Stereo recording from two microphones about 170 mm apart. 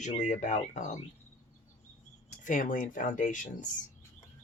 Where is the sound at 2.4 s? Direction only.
50° left (ahead or behind).